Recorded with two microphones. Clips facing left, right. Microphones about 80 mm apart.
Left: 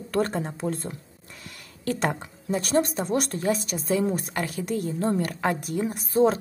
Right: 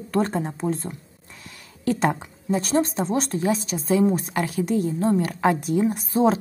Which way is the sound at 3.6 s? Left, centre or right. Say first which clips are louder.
Right 3 dB; left.